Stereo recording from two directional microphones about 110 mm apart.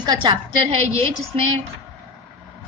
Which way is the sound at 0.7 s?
60° right (ahead or behind).